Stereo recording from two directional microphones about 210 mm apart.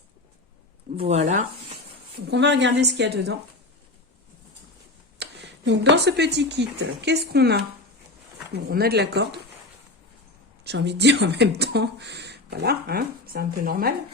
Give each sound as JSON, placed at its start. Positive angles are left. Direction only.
{"t": 0.9, "sound": "speech", "side_deg": -30}
{"t": 2.3, "sound": "a woman's voice", "side_deg": -55}
{"t": 5.2, "sound": "speech", "side_deg": -55}
{"t": 10.6, "sound": "speech", "side_deg": -55}